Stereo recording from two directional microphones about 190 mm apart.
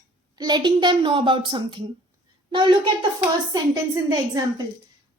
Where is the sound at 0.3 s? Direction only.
20° right (ahead or behind).